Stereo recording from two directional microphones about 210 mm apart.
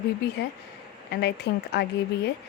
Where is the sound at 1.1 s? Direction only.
50° left (ahead or behind).